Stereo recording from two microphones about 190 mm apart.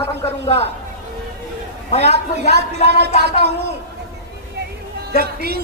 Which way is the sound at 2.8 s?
60° right (ahead or behind).